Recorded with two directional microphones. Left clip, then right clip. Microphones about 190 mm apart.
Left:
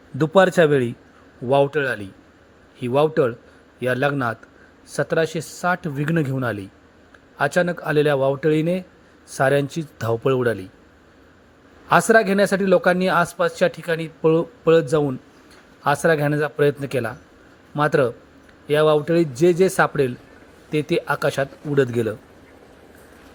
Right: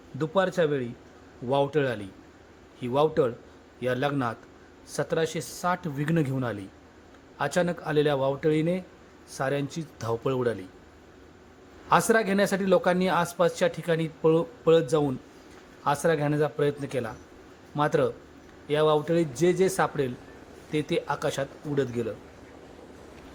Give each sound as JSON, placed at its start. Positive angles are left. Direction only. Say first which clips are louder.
{"t": 0.2, "sound": "speech", "louder": "left 10 dB", "side_deg": 30}
{"t": 1.5, "sound": "speech", "louder": "left 7 dB", "side_deg": 20}
{"t": 11.9, "sound": "speech", "louder": "left 7 dB", "side_deg": 20}